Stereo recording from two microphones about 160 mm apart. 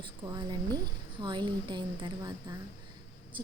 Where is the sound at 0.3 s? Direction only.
25° right (ahead or behind).